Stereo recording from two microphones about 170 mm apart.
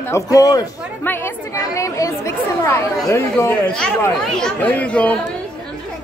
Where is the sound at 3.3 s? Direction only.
5° left (ahead or behind).